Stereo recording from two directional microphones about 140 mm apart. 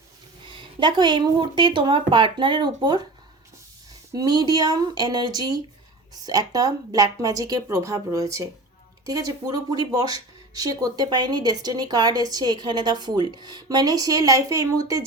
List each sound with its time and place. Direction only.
0.4 s speech: 35° right (ahead or behind)
4.1 s speech: 25° right (ahead or behind)